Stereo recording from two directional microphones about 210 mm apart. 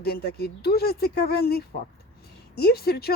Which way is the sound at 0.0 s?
50° left (ahead or behind).